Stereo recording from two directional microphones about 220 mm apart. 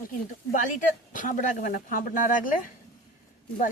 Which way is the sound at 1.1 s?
35° left (ahead or behind).